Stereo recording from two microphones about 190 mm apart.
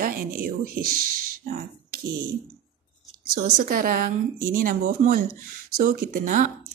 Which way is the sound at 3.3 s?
50° right (ahead or behind).